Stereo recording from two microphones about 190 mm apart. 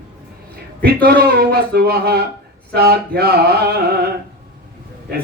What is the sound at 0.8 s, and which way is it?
A man's voice, 55° right (ahead or behind).